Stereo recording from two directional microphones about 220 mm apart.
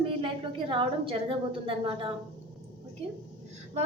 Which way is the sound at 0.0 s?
25° right (ahead or behind).